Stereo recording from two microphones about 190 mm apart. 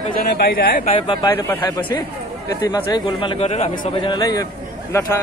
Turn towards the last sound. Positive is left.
turn(degrees=15)  # may be behind; listen again after turning